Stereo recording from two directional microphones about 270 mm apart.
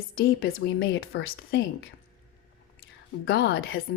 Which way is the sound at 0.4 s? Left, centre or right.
Left.